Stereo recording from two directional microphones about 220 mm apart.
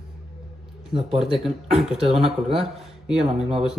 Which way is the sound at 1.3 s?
Centre (ahead or behind).